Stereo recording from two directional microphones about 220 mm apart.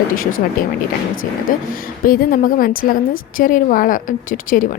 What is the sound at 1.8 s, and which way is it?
A woman's voice, 40° left (ahead or behind).